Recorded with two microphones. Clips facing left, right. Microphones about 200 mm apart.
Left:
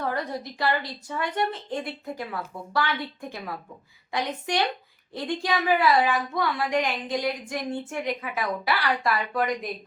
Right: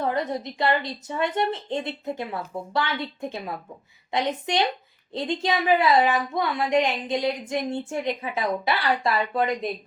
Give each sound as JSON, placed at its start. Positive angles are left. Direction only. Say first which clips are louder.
{"t": 0.0, "sound": "a woman's voice", "louder": "right 3 dB", "side_deg": -20}